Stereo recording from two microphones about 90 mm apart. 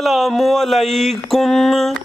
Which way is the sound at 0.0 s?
Centre (ahead or behind).